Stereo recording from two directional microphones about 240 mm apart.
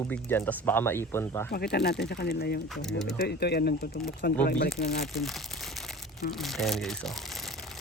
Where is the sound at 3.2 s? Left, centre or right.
Left.